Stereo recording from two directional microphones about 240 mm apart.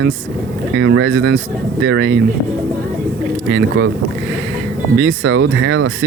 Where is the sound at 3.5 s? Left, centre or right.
Right.